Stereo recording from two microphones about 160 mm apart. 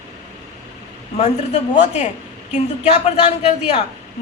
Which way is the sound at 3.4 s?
40° left (ahead or behind).